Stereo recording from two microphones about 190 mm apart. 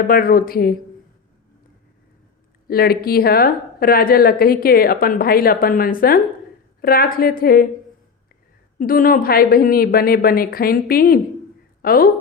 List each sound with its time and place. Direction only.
0.1 s a woman's voice: 50° left (ahead or behind)
2.6 s a woman's voice: 55° left (ahead or behind)
8.8 s a woman's voice: 50° left (ahead or behind)